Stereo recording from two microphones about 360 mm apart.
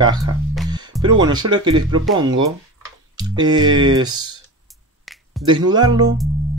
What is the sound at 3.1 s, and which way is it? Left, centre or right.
Speech, centre.